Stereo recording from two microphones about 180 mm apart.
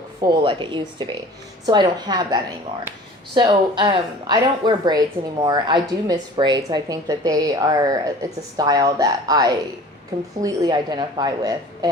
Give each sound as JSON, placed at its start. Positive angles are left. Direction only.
{"t": 0.2, "sound": "speech", "side_deg": -25}